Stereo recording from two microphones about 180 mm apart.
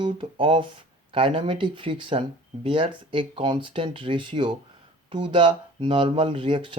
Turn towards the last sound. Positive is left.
turn(degrees=-30)  # may be behind; listen again after turning